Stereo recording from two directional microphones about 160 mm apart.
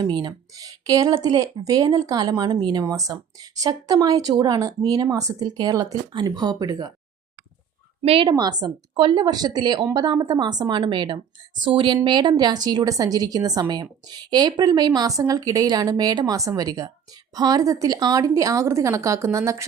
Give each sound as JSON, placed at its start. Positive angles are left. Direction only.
{"t": 0.0, "sound": "speech", "side_deg": -25}
{"t": 8.0, "sound": "speech", "side_deg": -35}